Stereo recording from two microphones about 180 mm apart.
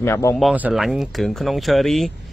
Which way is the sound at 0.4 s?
5° right (ahead or behind).